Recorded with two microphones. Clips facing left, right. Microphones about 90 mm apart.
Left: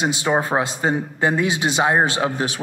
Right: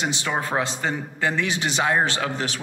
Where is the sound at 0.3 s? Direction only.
25° left (ahead or behind).